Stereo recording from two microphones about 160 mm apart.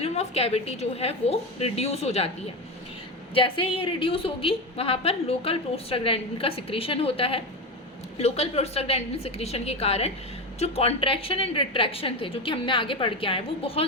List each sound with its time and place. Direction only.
0.0 s a woman's voice: 40° left (ahead or behind)
3.3 s a woman's voice: 35° left (ahead or behind)